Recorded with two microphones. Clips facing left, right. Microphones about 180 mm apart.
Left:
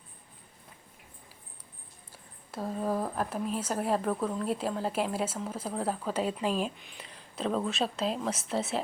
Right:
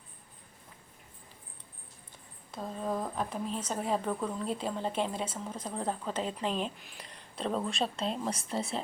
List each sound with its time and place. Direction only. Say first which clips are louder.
2.5 s a woman's voice: left 3 dB; 5° left (ahead or behind)